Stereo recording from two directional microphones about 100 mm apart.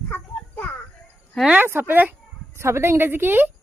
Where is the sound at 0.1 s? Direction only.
20° left (ahead or behind).